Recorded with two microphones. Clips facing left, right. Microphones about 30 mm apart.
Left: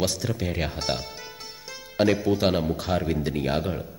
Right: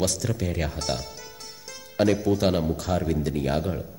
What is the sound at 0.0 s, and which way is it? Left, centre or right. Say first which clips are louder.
A man's voice: even; centre.